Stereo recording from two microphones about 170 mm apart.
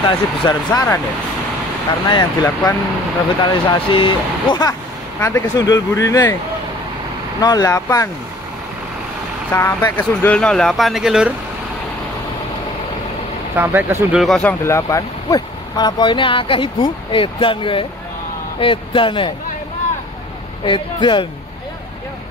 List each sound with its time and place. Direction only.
0.0 s speech: 25° left (ahead or behind)
2.0 s speech: 25° left (ahead or behind)
7.4 s speech: 20° left (ahead or behind)
9.5 s speech: 15° left (ahead or behind); by 11.3 s 5° right (ahead or behind)
13.6 s speech: 10° right (ahead or behind)
14.2 s speech: 5° left (ahead or behind); by 19.3 s 30° left (ahead or behind)
20.6 s speech: 30° left (ahead or behind)